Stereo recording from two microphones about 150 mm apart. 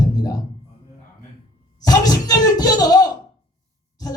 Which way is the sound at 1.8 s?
25° left (ahead or behind).